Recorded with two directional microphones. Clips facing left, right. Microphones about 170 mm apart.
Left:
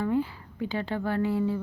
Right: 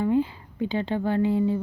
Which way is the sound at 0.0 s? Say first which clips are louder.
Right 4 dB; 20° right (ahead or behind).